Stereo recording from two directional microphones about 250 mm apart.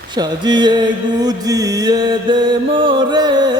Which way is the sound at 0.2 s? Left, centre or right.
Centre.